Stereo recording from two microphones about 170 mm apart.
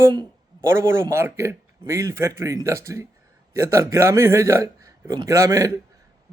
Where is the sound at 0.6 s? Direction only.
15° right (ahead or behind).